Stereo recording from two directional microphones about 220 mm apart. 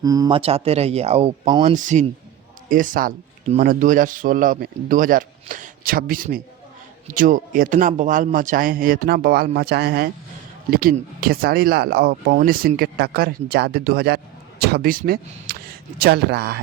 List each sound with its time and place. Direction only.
0.0 s speech: 15° right (ahead or behind)
1.7 s speech: 35° right (ahead or behind)